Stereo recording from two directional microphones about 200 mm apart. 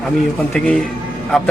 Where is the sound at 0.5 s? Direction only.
5° left (ahead or behind).